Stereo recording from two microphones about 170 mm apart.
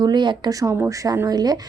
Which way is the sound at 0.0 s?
25° right (ahead or behind).